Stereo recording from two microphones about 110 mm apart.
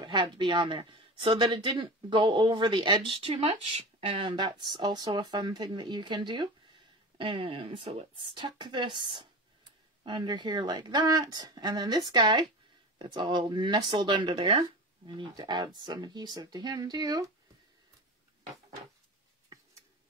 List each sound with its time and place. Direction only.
0.0 s speech: 45° right (ahead or behind)
4.4 s speech: 40° right (ahead or behind)